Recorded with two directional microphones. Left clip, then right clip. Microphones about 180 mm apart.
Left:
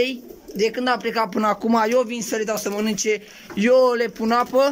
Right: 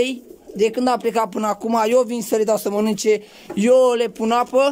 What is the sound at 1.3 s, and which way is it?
Speech, 10° right (ahead or behind).